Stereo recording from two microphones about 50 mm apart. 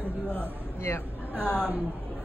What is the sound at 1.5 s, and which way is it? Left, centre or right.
Speech, right.